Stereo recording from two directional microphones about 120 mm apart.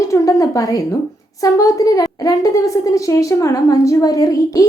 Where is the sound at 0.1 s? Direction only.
25° left (ahead or behind).